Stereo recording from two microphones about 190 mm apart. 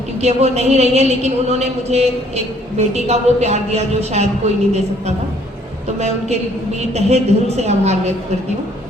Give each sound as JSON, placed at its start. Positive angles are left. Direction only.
{"t": 0.2, "sound": "speech", "side_deg": -35}
{"t": 6.0, "sound": "speech", "side_deg": -35}